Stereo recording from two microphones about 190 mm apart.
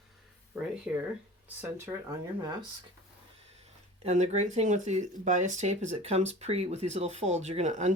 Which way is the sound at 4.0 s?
35° right (ahead or behind).